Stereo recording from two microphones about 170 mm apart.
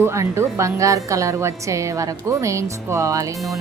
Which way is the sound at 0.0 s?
15° right (ahead or behind).